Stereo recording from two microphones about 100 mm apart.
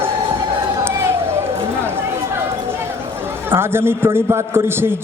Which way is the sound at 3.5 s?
25° right (ahead or behind).